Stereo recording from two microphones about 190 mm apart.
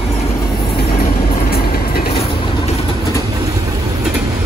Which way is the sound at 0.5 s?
55° left (ahead or behind).